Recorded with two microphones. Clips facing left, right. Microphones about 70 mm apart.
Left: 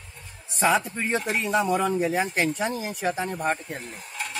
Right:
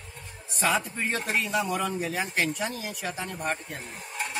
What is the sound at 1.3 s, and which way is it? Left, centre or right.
Speech, left.